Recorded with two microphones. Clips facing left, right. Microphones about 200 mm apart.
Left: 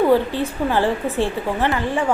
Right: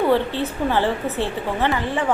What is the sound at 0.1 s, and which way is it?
A woman's voice, 10° left (ahead or behind).